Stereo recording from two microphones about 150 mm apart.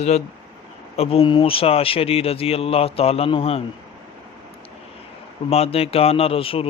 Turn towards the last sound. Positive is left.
turn(degrees=40)  # may be behind; listen again after turning